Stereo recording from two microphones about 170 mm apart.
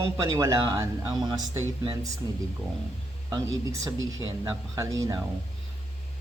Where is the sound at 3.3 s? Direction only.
20° right (ahead or behind).